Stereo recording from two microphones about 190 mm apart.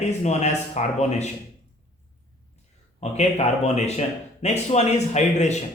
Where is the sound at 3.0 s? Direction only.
35° left (ahead or behind).